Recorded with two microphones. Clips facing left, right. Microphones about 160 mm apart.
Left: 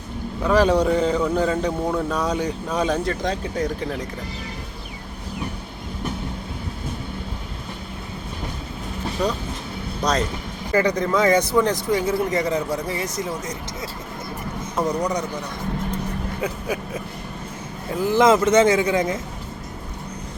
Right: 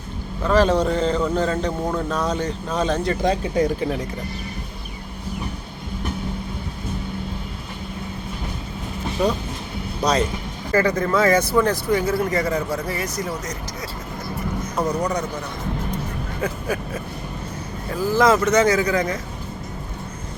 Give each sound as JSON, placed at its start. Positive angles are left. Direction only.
{"t": 0.4, "sound": "speech", "side_deg": 10}
{"t": 3.1, "sound": "speech", "side_deg": -10}
{"t": 9.2, "sound": "a man's voice", "side_deg": -5}
{"t": 10.7, "sound": "a man's voice", "side_deg": 15}
{"t": 14.8, "sound": "a man's voice", "side_deg": 0}
{"t": 16.4, "sound": "vehicle", "side_deg": 15}
{"t": 17.9, "sound": "a man's voice", "side_deg": 20}